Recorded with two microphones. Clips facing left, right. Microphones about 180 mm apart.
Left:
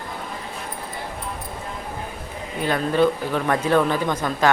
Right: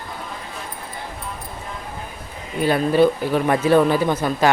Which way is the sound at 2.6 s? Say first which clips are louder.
Right 3 dB; 10° right (ahead or behind).